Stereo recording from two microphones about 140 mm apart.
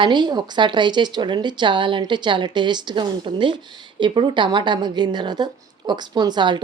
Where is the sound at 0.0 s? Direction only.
30° right (ahead or behind).